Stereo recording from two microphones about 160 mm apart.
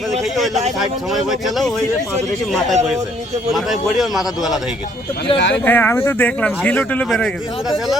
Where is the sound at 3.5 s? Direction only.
Centre (ahead or behind).